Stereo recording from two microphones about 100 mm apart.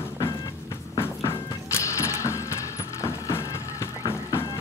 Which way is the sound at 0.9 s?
25° left (ahead or behind).